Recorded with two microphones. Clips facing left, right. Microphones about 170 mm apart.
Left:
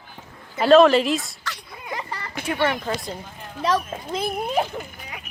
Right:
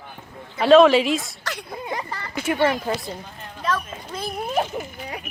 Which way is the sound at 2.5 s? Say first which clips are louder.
Right 2 dB; 5° right (ahead or behind).